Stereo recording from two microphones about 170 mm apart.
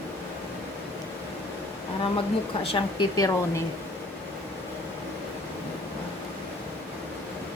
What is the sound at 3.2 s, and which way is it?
Speech, 20° left (ahead or behind).